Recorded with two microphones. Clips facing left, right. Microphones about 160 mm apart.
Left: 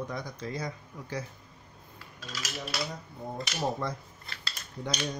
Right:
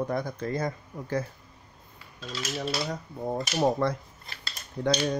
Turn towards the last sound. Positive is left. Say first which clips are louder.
# right 9 dB
turn(degrees=-65)  # may be behind; listen again after turning